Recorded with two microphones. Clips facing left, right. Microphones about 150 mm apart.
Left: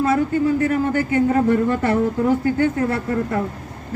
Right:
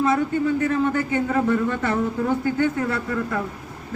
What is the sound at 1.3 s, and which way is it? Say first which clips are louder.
A man's voice: left 4 dB; 45° left (ahead or behind).